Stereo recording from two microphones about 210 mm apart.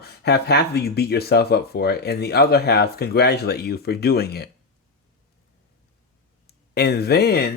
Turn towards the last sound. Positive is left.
turn(degrees=50)  # may be behind; listen again after turning